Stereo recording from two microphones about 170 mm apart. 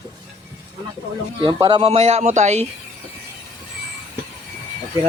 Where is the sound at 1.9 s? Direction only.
40° right (ahead or behind).